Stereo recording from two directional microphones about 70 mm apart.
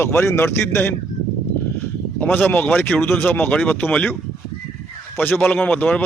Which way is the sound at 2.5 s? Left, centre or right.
Left.